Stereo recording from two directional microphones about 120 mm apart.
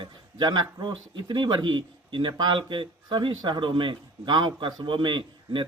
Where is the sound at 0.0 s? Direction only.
40° right (ahead or behind).